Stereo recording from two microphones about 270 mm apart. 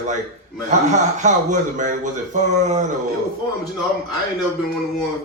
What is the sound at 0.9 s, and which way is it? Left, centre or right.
Speech, right.